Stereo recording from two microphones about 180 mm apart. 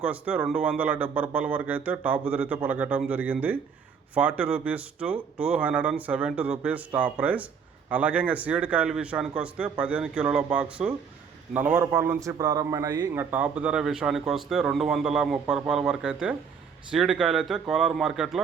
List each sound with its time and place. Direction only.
0.0 s speech: 10° right (ahead or behind)
13.3 s a man's voice: 10° right (ahead or behind)